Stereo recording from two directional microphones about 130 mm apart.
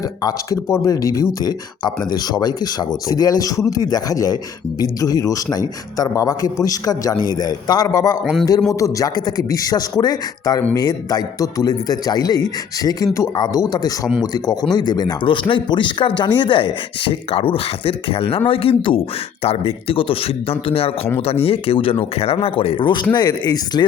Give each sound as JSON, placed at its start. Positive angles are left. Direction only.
{"t": 0.2, "sound": "speech", "side_deg": 30}
{"t": 8.2, "sound": "a man's voice", "side_deg": 0}
{"t": 8.7, "sound": "speech", "side_deg": 25}